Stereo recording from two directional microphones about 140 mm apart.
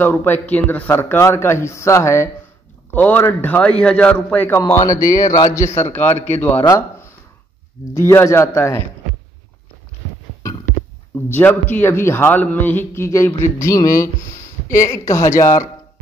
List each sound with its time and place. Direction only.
0.0 s a man's voice: 15° left (ahead or behind)
5.9 s a man's voice: 15° left (ahead or behind)
11.2 s a man's voice: 15° left (ahead or behind)